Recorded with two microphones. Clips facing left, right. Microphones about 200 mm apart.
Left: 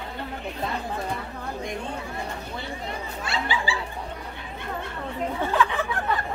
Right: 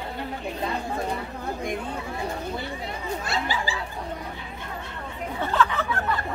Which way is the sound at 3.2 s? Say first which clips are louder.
Left 2 dB; 40° right (ahead or behind).